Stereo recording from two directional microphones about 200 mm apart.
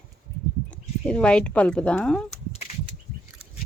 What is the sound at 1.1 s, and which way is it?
Speech, 5° left (ahead or behind).